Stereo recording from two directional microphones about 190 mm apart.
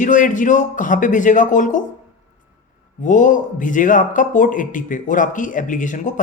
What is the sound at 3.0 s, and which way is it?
Speech, 40° left (ahead or behind).